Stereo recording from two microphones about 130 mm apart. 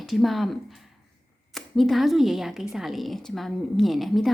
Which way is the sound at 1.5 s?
Centre (ahead or behind).